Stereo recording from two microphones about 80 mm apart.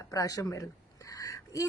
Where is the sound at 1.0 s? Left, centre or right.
Left.